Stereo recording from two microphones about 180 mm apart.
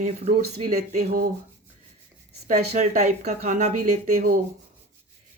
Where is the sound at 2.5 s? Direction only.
40° right (ahead or behind).